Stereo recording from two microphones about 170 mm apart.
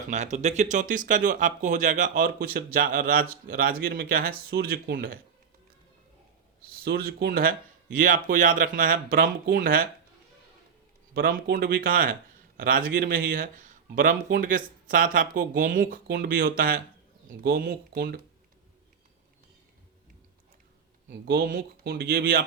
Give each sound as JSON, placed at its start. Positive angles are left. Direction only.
{"t": 0.0, "sound": "speech", "side_deg": -45}
{"t": 6.7, "sound": "speech", "side_deg": -60}
{"t": 11.1, "sound": "speech", "side_deg": -65}
{"t": 21.1, "sound": "speech", "side_deg": -65}